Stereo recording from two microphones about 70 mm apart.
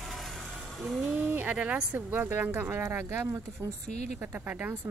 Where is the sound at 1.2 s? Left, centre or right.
Right.